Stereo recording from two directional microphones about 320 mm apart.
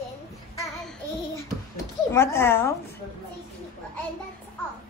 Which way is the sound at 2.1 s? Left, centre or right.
Centre.